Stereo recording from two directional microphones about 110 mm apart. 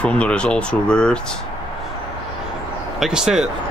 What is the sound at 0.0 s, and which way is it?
Speech, 10° left (ahead or behind).